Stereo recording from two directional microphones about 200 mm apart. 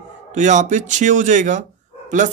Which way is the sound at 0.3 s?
35° right (ahead or behind).